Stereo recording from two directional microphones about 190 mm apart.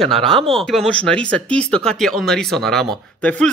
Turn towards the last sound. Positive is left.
turn(degrees=5)  # may be behind; listen again after turning